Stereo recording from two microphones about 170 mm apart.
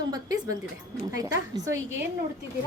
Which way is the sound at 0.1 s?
20° right (ahead or behind).